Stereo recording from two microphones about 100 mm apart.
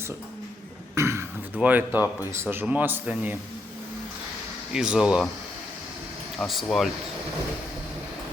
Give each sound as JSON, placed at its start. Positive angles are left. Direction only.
{"t": 0.9, "sound": "beatboxing", "side_deg": -30}
{"t": 1.5, "sound": "a man's voice", "side_deg": -15}
{"t": 4.7, "sound": "a man's voice", "side_deg": -5}
{"t": 6.4, "sound": "speech", "side_deg": 0}